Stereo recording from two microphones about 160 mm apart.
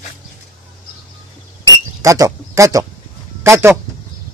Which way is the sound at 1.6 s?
20° right (ahead or behind).